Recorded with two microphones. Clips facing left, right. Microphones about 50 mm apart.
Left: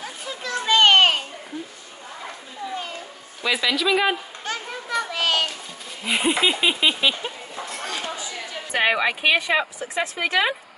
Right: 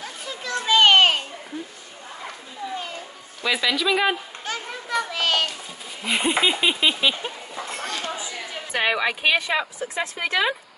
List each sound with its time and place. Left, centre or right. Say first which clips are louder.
0.0 s children playing: left 1 dB; centre
2.2 s children playing: even; centre
6.0 s speech: even; centre
7.8 s a sound: left 1 dB; centre
8.1 s a sound: even; centre
8.7 s a woman's voice: left 2 dB; centre
10.1 s speech: left 3 dB; left